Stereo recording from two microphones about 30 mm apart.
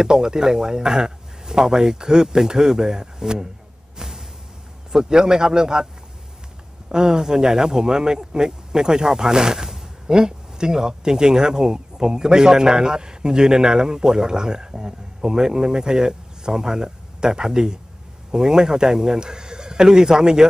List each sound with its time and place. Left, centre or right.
0.0 s speech: right
4.0 s music: right
4.9 s speech: right
6.9 s speech: right